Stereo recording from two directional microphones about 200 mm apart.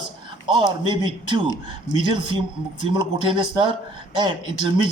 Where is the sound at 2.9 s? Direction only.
25° right (ahead or behind).